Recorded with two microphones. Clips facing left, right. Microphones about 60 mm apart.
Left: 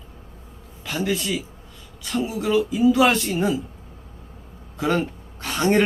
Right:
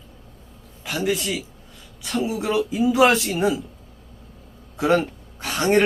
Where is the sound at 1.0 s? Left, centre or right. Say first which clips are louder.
Right 1 dB; centre.